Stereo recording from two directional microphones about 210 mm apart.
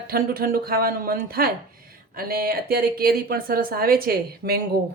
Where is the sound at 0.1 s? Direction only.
45° right (ahead or behind).